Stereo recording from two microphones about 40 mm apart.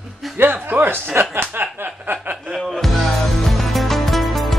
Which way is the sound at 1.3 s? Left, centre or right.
Right.